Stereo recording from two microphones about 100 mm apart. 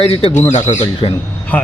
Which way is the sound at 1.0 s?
50° left (ahead or behind).